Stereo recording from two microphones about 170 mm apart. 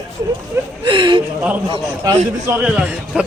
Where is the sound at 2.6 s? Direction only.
5° right (ahead or behind).